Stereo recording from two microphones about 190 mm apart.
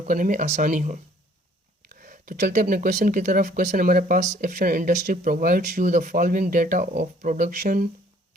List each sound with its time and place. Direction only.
0.0 s speech: 40° right (ahead or behind)
2.0 s speech: 45° right (ahead or behind)